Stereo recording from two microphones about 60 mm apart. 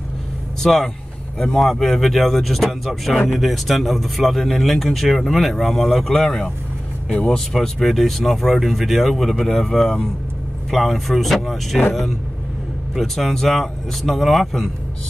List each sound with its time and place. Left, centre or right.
0.6 s speech: centre
7.1 s speech: left
7.3 s speech: centre
12.9 s speech: centre